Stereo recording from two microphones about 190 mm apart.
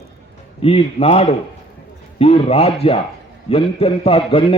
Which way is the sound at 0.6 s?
30° left (ahead or behind).